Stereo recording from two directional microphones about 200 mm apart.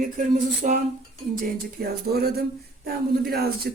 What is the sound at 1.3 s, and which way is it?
Speech, 45° right (ahead or behind).